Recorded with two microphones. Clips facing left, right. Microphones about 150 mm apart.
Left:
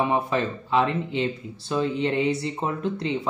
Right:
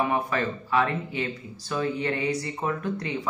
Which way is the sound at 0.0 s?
20° left (ahead or behind).